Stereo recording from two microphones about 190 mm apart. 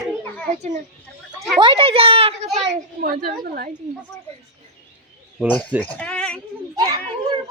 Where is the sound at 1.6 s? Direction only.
25° right (ahead or behind).